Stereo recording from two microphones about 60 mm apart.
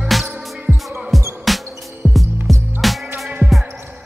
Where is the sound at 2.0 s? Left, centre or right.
Centre.